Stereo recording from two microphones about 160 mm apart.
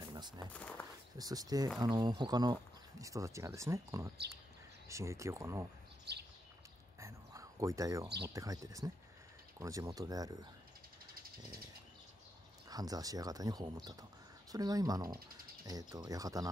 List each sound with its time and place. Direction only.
0.1 s a sound: 25° right (ahead or behind)
0.5 s speech: 10° left (ahead or behind)
1.1 s speech: 25° right (ahead or behind)
6.1 s bird: 90° right
7.0 s a sound: 20° right (ahead or behind)
8.3 s speech: 20° right (ahead or behind)
12.6 s speech: 25° right (ahead or behind)